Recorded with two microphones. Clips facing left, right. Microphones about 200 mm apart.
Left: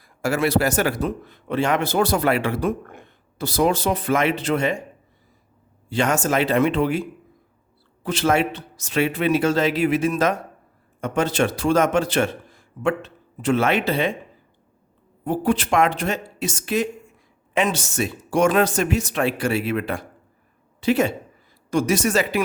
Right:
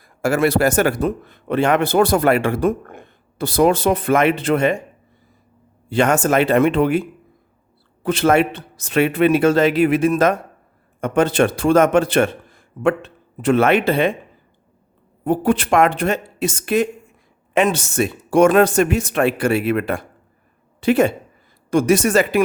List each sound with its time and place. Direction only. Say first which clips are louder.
0.0 s a man's voice: right 4 dB; 50° right (ahead or behind)
5.9 s a man's voice: right 5 dB; 55° right (ahead or behind)
8.0 s a man's voice: right 5 dB; 55° right (ahead or behind)
15.2 s a man's voice: right 4 dB; 55° right (ahead or behind)